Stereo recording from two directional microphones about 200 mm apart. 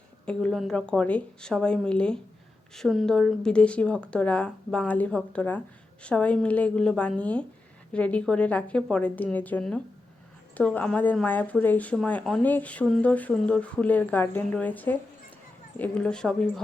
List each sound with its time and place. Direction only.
0.3 s speech: 5° left (ahead or behind)